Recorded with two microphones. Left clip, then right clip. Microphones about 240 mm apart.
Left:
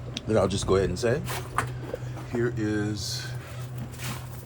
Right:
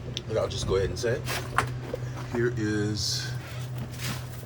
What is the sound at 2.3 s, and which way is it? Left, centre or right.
Speech, centre.